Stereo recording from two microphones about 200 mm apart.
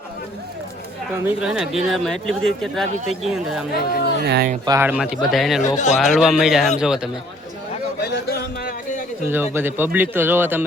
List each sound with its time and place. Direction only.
1.2 s speech: 5° right (ahead or behind)
4.2 s speech: 50° right (ahead or behind)
4.6 s speech: 15° right (ahead or behind)
5.7 s speech: 35° left (ahead or behind)
6.0 s speech: centre (ahead or behind)
8.0 s a sound: 50° left (ahead or behind)
9.3 s speech: 10° right (ahead or behind)